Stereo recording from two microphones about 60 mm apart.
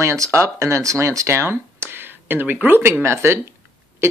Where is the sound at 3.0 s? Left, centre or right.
Right.